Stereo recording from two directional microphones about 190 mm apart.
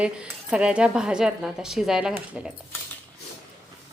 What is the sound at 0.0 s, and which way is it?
Speech, 5° right (ahead or behind).